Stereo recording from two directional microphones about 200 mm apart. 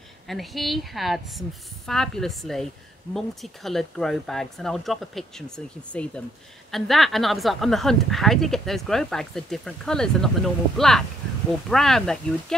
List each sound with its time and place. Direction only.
0.3 s speech: centre (ahead or behind)